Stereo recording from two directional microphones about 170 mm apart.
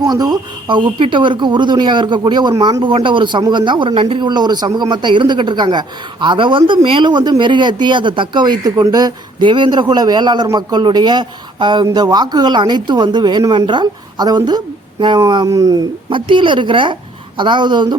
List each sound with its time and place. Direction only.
0.0 s speech: 25° right (ahead or behind)